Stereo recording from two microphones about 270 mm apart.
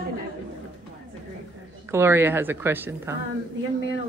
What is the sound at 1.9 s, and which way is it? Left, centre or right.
Speech, centre.